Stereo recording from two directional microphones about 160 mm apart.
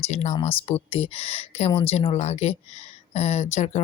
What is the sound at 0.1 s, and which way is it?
Speech, 45° left (ahead or behind).